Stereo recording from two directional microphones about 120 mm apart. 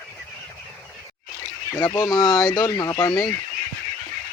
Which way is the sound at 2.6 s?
30° left (ahead or behind).